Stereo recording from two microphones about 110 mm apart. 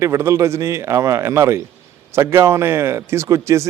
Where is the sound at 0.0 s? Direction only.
25° right (ahead or behind).